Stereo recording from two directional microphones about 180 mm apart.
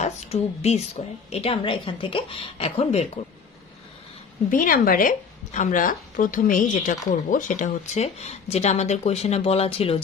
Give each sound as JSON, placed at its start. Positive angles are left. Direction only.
{"t": 0.0, "sound": "a woman's voice", "side_deg": 35}
{"t": 4.5, "sound": "a woman's voice", "side_deg": 50}